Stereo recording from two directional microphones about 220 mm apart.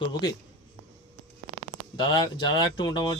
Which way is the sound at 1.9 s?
20° left (ahead or behind).